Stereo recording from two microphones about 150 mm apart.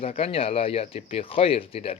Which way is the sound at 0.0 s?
40° left (ahead or behind).